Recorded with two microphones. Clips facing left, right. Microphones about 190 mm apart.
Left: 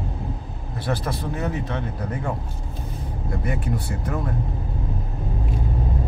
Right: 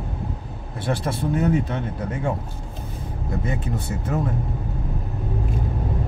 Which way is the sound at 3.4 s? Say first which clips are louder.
Left 1 dB; 20° right (ahead or behind).